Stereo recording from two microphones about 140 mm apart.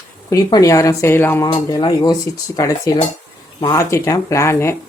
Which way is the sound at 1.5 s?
30° left (ahead or behind).